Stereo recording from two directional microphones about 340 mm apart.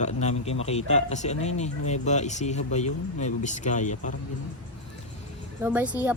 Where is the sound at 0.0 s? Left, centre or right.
Centre.